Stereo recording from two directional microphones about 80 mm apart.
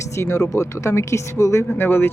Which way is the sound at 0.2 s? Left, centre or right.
Left.